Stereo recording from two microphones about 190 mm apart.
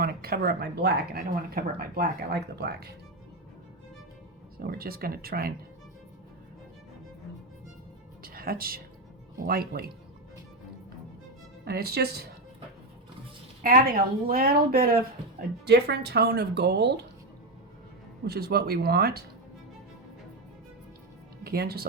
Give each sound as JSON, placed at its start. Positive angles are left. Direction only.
{"t": 0.0, "sound": "speech", "side_deg": -55}
{"t": 4.6, "sound": "a woman's voice", "side_deg": -50}
{"t": 8.2, "sound": "a woman's voice", "side_deg": -50}
{"t": 11.6, "sound": "speech", "side_deg": -55}
{"t": 13.6, "sound": "a woman's voice", "side_deg": -50}
{"t": 18.3, "sound": "speech", "side_deg": -55}
{"t": 21.4, "sound": "speech", "side_deg": -55}